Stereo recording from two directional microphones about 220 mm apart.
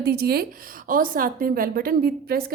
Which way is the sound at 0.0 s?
45° right (ahead or behind).